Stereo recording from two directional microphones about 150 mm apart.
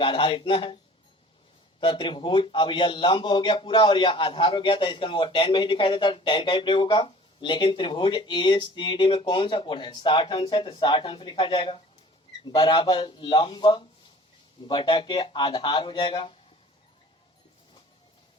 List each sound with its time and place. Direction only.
0.0 s speech: 35° left (ahead or behind)
1.8 s speech: 35° left (ahead or behind)